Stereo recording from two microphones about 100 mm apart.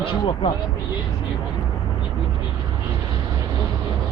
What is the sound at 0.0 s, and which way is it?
Speech, 55° left (ahead or behind).